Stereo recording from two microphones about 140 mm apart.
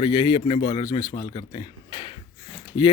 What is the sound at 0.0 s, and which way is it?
Speech, 35° left (ahead or behind).